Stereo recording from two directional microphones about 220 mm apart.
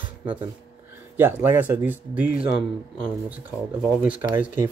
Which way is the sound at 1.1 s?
10° right (ahead or behind).